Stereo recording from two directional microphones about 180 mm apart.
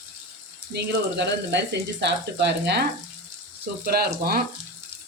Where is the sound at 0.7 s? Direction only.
70° right (ahead or behind).